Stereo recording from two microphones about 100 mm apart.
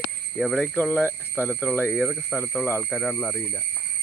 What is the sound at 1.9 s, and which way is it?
Speech, 5° right (ahead or behind).